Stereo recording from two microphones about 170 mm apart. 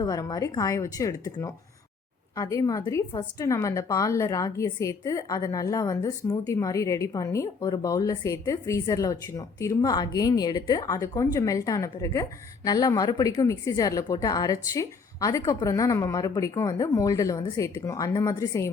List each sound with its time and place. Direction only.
0.0 s a woman's voice: 20° left (ahead or behind)